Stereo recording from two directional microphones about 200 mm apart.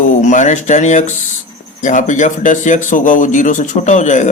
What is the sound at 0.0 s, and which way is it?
Speech, 35° left (ahead or behind).